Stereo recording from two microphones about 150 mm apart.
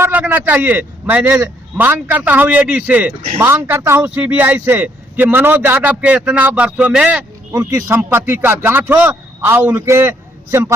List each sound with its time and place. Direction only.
0.0 s a man's voice: 10° right (ahead or behind)